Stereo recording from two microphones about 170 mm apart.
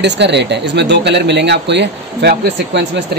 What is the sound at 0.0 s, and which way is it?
Speech, 90° right.